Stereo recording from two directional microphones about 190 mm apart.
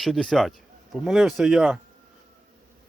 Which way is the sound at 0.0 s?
Centre (ahead or behind).